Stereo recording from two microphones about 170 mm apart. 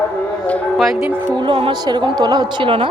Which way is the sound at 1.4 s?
30° right (ahead or behind).